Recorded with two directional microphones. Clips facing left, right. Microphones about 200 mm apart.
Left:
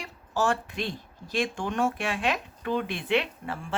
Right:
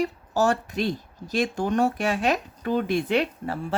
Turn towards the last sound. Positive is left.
turn(degrees=-40)  # may be behind; listen again after turning